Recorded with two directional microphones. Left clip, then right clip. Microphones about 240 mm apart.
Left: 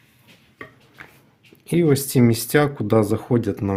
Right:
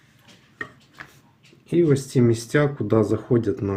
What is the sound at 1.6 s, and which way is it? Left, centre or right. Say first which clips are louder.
Speech: left 1 dB; left.